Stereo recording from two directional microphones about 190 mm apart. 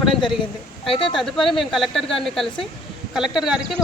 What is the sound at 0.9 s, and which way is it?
Speech, 30° left (ahead or behind).